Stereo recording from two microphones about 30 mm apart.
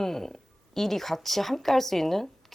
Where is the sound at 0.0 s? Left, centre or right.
Centre.